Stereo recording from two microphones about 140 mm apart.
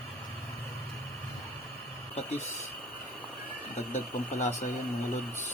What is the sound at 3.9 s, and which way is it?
Speech, 60° left (ahead or behind).